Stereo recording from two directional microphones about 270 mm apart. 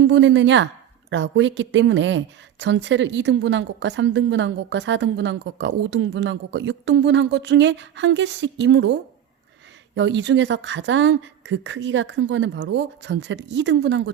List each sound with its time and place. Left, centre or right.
0.0 s speech: right